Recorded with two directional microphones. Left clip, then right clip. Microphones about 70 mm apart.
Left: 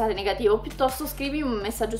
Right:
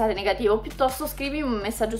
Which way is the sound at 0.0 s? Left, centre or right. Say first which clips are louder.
Right 1 dB; right.